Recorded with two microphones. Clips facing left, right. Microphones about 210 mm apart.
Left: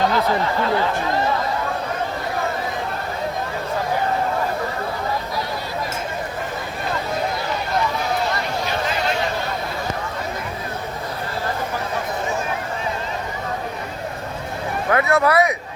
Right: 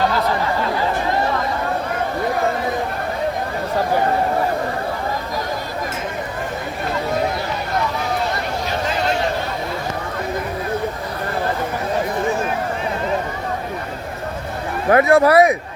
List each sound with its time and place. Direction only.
14.8 s speech: 30° right (ahead or behind)